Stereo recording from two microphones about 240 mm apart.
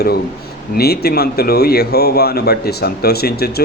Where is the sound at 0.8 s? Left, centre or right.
Left.